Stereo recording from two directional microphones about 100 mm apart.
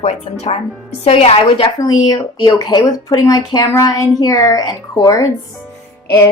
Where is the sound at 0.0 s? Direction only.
90° left.